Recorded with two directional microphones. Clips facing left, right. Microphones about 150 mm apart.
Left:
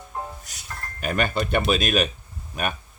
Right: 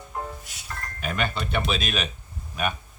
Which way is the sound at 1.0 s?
45° left (ahead or behind).